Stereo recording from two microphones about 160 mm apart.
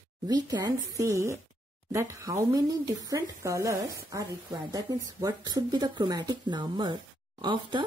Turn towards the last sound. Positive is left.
turn(degrees=-30)  # may be behind; listen again after turning